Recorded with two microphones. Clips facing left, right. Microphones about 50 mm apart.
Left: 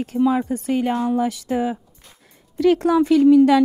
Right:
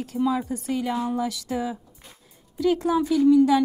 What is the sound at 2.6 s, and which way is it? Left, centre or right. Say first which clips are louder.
Speech: left 6 dB; left.